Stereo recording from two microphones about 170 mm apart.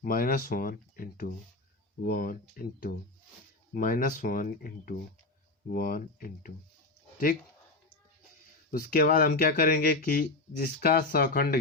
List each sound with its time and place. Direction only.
0.0 s speech: 60° left (ahead or behind)
8.7 s speech: 65° left (ahead or behind)